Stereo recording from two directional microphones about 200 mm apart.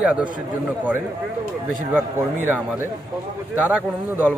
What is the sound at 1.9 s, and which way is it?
Speech, 10° right (ahead or behind).